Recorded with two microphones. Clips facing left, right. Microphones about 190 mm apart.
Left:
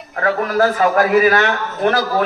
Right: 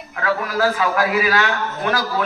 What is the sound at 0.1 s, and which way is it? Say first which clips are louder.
A man's voice: left 4 dB; 50° left (ahead or behind).